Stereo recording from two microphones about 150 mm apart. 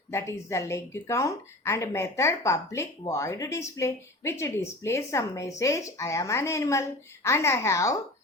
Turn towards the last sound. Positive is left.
turn(degrees=20)  # may be behind; listen again after turning